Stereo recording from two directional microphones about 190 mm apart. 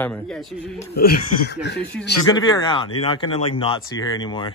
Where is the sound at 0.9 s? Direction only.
60° left (ahead or behind).